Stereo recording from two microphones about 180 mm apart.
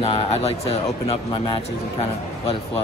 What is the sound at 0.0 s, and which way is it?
Speech, 30° left (ahead or behind).